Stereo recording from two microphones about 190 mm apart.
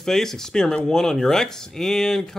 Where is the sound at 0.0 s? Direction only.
Centre (ahead or behind).